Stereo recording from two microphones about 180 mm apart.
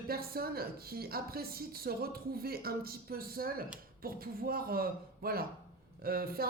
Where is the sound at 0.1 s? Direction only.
55° right (ahead or behind).